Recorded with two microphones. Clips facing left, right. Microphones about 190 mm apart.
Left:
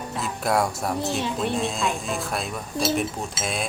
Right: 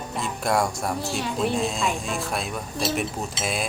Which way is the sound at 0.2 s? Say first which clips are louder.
Even; centre (ahead or behind).